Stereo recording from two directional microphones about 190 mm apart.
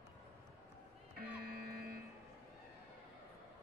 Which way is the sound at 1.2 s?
55° right (ahead or behind).